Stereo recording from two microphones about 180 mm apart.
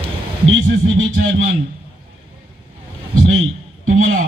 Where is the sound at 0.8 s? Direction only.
90° right.